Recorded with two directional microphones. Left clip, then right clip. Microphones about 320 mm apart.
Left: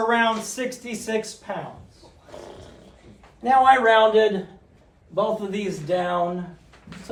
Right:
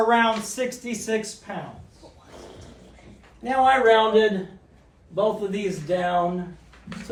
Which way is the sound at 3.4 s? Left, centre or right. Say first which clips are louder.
Left 3 dB; left.